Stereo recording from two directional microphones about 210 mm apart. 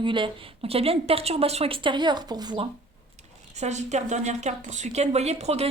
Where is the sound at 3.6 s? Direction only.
35° right (ahead or behind).